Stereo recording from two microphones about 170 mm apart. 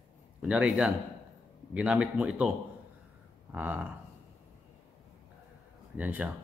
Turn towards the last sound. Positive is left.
turn(degrees=-10)  # may be behind; listen again after turning